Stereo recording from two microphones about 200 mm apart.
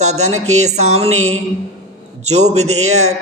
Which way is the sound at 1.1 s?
90° right.